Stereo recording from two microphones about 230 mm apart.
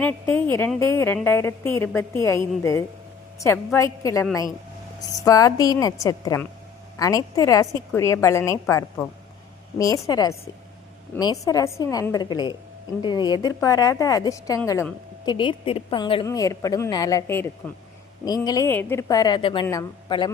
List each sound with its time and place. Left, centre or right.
0.0 s speech: centre